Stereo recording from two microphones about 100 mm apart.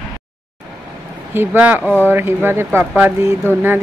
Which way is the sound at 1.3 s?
20° right (ahead or behind).